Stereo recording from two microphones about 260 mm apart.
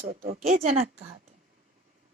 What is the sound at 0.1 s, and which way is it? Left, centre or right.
Speech, right.